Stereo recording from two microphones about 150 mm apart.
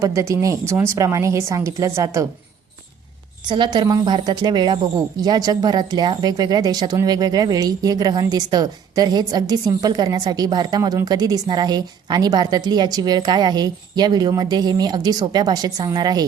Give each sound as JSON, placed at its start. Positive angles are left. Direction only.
{"t": 0.0, "sound": "speech", "side_deg": -20}
{"t": 3.5, "sound": "speech", "side_deg": -30}